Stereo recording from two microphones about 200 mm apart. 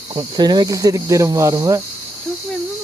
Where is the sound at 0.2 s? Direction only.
20° right (ahead or behind).